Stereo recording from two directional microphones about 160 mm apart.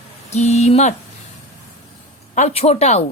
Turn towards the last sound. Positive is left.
turn(degrees=40)  # may be behind; listen again after turning